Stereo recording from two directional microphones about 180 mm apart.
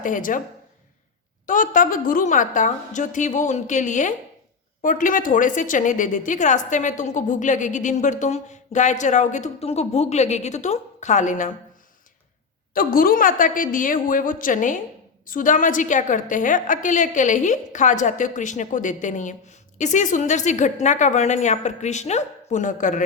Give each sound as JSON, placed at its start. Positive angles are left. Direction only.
{"t": 0.0, "sound": "a woman's voice", "side_deg": 45}
{"t": 1.5, "sound": "a woman's voice", "side_deg": 50}
{"t": 12.7, "sound": "a woman's voice", "side_deg": 50}